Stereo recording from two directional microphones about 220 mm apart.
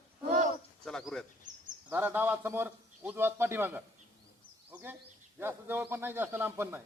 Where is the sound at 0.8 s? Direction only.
Centre (ahead or behind).